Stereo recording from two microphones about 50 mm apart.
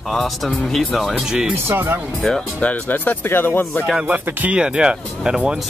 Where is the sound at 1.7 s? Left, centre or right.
Right.